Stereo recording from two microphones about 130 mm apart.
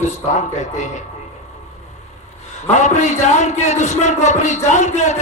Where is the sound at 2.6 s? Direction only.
65° left (ahead or behind).